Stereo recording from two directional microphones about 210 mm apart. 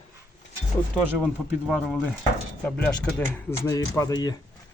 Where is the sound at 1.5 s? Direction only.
5° right (ahead or behind); by 4.4 s 20° left (ahead or behind).